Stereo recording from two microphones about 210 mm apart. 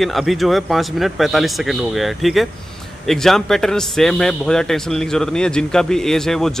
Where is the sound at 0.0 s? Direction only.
Centre (ahead or behind).